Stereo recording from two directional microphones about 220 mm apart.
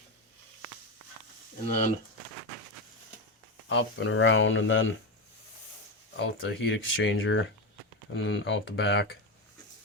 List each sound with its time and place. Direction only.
3.7 s speech: 60° left (ahead or behind)
6.1 s speech: 55° left (ahead or behind)